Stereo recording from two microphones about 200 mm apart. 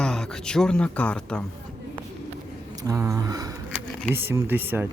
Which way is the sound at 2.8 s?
15° right (ahead or behind).